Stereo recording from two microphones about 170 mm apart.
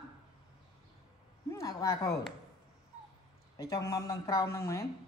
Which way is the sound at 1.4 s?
20° left (ahead or behind).